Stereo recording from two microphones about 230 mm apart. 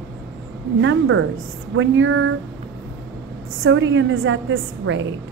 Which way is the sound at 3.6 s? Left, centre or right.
Right.